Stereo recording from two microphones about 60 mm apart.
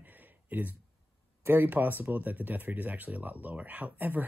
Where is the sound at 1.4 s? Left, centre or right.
Right.